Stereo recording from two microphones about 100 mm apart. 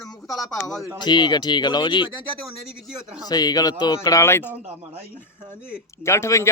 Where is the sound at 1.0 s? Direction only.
50° left (ahead or behind).